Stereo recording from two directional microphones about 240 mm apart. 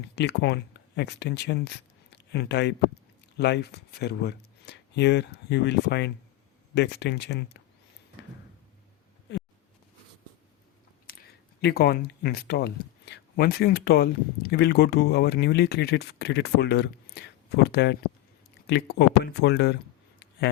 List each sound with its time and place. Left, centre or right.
0.2 s speech: left
11.1 s a sound: left
11.6 s speech: left